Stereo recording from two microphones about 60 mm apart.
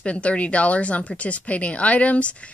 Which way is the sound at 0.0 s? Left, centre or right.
Left.